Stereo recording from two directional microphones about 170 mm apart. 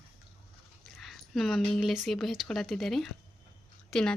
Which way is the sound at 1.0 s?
Centre (ahead or behind).